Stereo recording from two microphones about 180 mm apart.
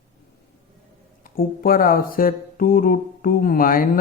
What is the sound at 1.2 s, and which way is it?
Speech, 55° left (ahead or behind).